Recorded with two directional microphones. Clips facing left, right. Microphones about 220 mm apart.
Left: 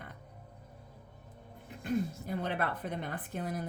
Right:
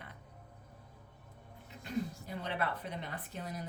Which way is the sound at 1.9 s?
50° left (ahead or behind).